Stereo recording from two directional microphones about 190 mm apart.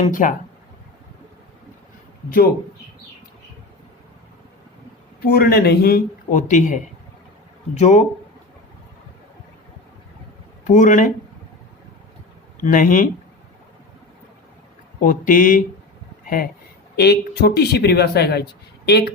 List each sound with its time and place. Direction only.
0.0 s a man's voice: 45° left (ahead or behind)
5.2 s a man's voice: 50° left (ahead or behind)
10.7 s speech: 40° left (ahead or behind)
12.5 s speech: 45° left (ahead or behind)
15.0 s a man's voice: 45° left (ahead or behind)
17.0 s speech: 60° left (ahead or behind)